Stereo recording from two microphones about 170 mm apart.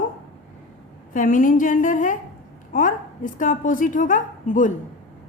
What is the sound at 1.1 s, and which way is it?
A woman's voice, 50° left (ahead or behind).